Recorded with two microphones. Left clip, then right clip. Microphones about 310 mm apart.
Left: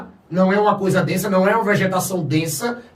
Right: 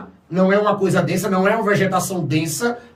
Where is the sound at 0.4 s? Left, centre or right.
Centre.